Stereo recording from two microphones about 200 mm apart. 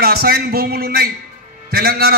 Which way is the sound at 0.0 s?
50° right (ahead or behind).